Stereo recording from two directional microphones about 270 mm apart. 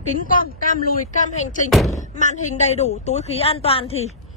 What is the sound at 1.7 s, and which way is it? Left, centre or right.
Speech, centre.